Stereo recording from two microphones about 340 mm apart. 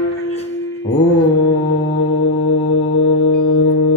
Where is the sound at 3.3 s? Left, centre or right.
Left.